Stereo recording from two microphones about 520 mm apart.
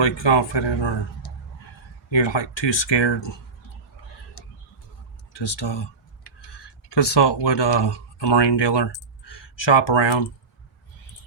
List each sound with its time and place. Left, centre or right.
0.0 s speech: left
5.3 s speech: left